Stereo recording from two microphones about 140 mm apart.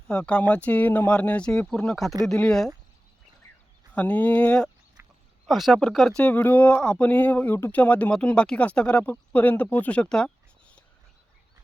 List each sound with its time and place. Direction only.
0.1 s speech: 10° left (ahead or behind)
3.9 s speech: 10° left (ahead or behind)
5.0 s a sound: 20° right (ahead or behind)
5.5 s speech: centre (ahead or behind)